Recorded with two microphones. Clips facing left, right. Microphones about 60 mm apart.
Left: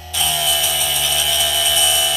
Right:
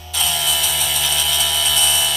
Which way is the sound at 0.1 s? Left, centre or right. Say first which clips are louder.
Left 2 dB; centre.